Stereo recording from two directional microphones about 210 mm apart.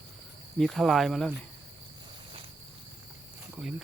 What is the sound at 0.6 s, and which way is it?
Speech, centre (ahead or behind).